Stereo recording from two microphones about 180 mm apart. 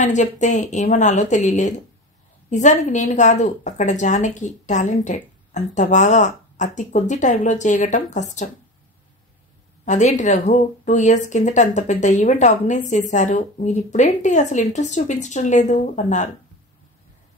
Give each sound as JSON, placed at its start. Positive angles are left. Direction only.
{"t": 0.0, "sound": "speech", "side_deg": 40}
{"t": 9.8, "sound": "speech", "side_deg": 40}